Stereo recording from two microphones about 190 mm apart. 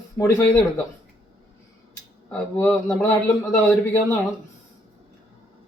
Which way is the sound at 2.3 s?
10° left (ahead or behind).